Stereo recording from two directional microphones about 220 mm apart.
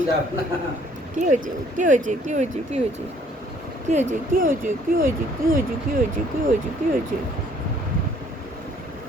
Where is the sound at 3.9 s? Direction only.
35° right (ahead or behind).